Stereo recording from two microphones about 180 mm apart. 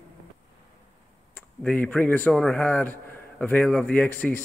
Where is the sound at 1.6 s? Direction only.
5° left (ahead or behind).